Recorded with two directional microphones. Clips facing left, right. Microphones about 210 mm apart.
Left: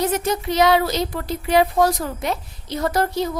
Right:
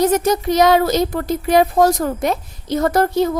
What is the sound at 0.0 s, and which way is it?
A woman's voice, 40° right (ahead or behind).